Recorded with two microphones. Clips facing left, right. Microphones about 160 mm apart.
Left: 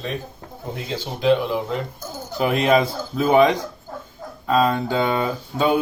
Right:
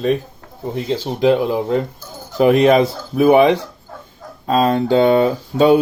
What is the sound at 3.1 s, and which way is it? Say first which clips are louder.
Speech: right 5 dB; 20° right (ahead or behind).